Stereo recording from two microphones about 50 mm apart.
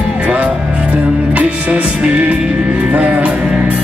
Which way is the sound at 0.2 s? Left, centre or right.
Right.